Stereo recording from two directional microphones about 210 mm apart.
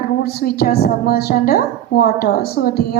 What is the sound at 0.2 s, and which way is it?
A woman's voice, 45° left (ahead or behind).